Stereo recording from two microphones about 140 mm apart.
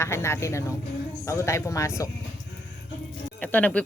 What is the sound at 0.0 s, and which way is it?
Speech, 20° left (ahead or behind).